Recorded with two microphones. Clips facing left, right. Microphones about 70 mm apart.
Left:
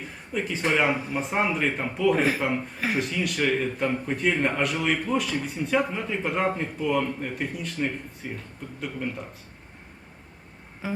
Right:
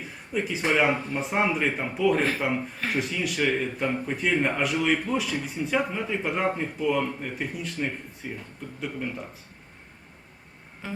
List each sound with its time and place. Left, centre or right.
0.0 s a man's voice: centre
10.8 s music: centre